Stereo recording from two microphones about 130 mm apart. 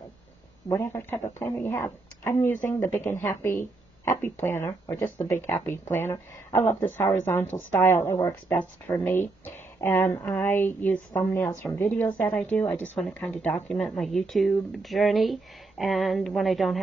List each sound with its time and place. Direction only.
0.7 s a woman's voice: 20° left (ahead or behind); by 16.8 s centre (ahead or behind)